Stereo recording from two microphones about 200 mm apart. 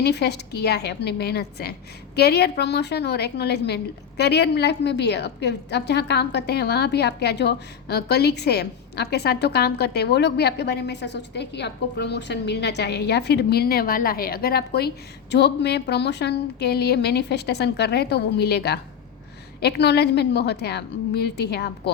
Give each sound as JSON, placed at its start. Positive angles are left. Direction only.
{"t": 0.0, "sound": "a woman's voice", "side_deg": 55}